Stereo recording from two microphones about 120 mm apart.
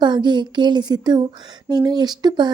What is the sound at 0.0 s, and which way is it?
A woman's voice, 40° right (ahead or behind).